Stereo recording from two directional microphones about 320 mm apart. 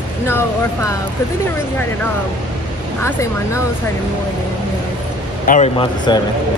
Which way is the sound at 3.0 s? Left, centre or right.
Centre.